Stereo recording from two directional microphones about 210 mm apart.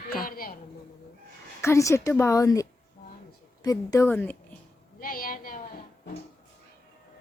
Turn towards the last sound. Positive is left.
turn(degrees=40)  # may be behind; listen again after turning